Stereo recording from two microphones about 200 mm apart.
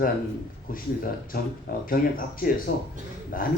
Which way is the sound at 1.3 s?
45° left (ahead or behind).